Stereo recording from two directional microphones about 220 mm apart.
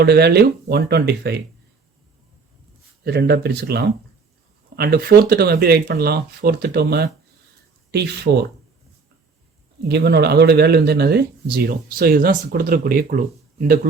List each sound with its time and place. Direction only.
0.0 s speech: 45° right (ahead or behind)
3.0 s speech: 50° right (ahead or behind)
9.9 s speech: 50° right (ahead or behind)